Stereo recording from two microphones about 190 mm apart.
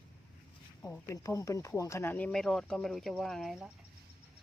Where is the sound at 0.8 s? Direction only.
15° left (ahead or behind).